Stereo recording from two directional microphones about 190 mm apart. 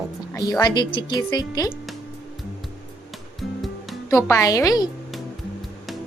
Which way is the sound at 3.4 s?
Centre (ahead or behind).